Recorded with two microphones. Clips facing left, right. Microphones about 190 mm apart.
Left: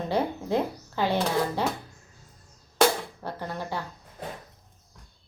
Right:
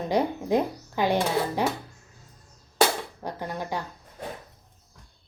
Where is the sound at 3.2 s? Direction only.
15° right (ahead or behind).